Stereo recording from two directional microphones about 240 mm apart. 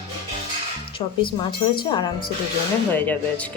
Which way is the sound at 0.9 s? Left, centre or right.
Centre.